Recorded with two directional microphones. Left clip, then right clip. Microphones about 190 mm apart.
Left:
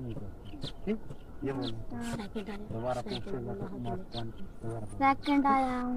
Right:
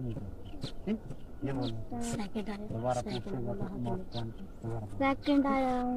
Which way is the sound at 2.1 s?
65° right (ahead or behind).